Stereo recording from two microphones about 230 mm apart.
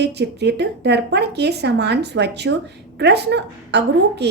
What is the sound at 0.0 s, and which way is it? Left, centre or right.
A woman's voice, right.